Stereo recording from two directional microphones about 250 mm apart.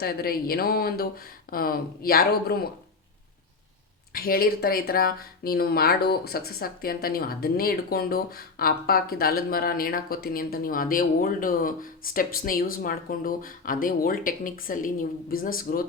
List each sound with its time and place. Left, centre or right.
0.0 s speech: left
4.1 s speech: left